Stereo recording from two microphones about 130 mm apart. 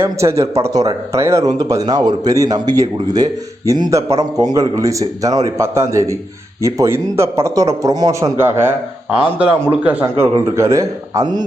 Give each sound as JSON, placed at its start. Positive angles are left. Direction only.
{"t": 0.0, "sound": "speech", "side_deg": -20}